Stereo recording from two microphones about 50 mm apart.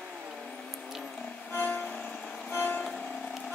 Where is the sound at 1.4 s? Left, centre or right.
Left.